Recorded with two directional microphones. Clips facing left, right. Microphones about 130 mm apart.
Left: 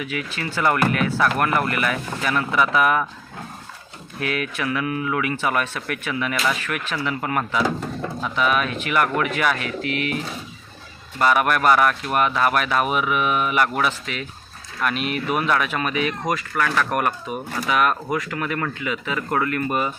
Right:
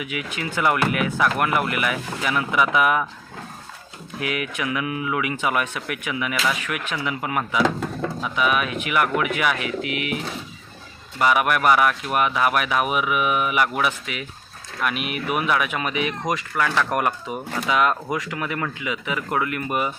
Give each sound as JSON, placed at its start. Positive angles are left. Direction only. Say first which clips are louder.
{"t": 0.0, "sound": "speech", "louder": "left 1 dB", "side_deg": -15}
{"t": 4.2, "sound": "speech", "louder": "left 1 dB", "side_deg": -15}
{"t": 11.2, "sound": "speech", "louder": "left 1 dB", "side_deg": -15}